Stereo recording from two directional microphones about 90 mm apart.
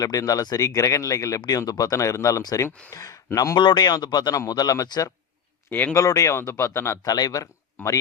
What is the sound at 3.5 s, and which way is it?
Speech, 55° left (ahead or behind).